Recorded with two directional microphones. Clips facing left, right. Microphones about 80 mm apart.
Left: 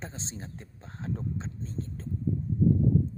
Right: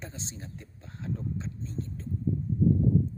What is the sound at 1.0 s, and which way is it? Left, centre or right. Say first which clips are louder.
Speech: even; left.